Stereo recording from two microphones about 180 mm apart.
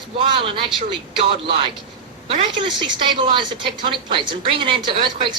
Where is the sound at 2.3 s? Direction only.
30° right (ahead or behind).